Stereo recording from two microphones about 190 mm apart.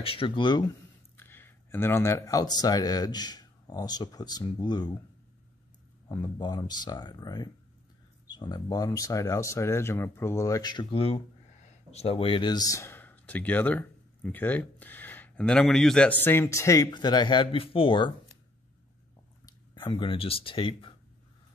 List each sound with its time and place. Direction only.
0.0 s speech: 30° left (ahead or behind)
1.1 s speech: 10° left (ahead or behind)
6.0 s speech: 25° left (ahead or behind)
19.4 s speech: 25° left (ahead or behind)